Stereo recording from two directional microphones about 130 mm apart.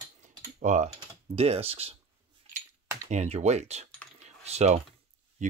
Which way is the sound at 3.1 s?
60° right (ahead or behind).